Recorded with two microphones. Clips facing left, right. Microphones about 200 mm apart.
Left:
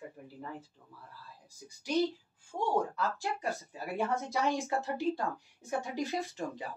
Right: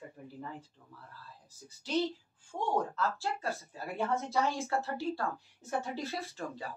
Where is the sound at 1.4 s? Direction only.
15° left (ahead or behind).